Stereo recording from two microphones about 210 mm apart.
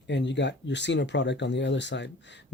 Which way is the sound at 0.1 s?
55° left (ahead or behind).